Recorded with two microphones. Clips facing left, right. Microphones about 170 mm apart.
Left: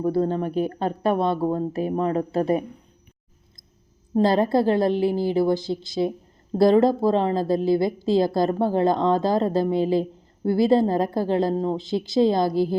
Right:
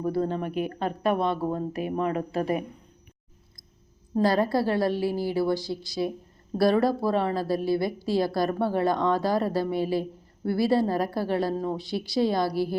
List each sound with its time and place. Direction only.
0.0 s a woman's voice: 25° left (ahead or behind)
4.1 s a woman's voice: 25° left (ahead or behind)